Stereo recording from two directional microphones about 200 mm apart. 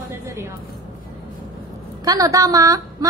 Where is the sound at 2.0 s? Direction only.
15° right (ahead or behind).